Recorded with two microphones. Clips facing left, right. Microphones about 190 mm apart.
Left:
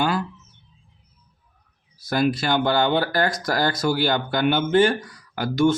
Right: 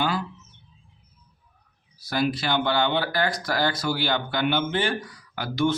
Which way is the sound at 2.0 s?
45° left (ahead or behind).